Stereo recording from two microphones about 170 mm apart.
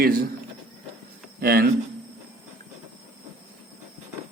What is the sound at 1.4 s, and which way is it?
Speech, 65° right (ahead or behind).